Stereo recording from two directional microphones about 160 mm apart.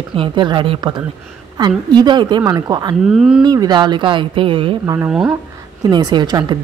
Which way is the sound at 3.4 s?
25° right (ahead or behind).